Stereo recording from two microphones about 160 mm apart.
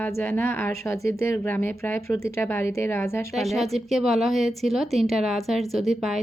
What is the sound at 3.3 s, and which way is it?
A woman's voice, centre (ahead or behind).